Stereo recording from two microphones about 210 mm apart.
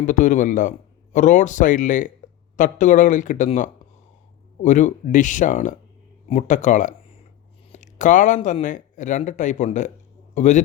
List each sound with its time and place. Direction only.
0.0 s a man's voice: 40° left (ahead or behind)